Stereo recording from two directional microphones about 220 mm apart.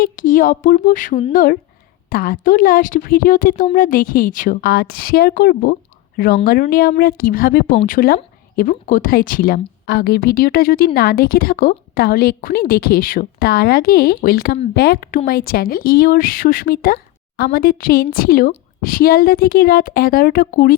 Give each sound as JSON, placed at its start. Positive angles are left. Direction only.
{"t": 0.0, "sound": "speech", "side_deg": 40}